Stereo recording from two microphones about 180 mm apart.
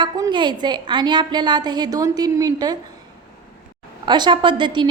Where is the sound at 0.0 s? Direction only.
25° right (ahead or behind).